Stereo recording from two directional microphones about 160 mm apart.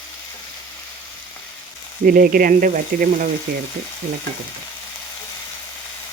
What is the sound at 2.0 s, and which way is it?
Speech, 65° right (ahead or behind).